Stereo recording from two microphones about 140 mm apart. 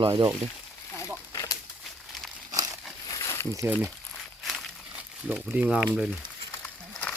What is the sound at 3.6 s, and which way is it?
Speech, 20° right (ahead or behind).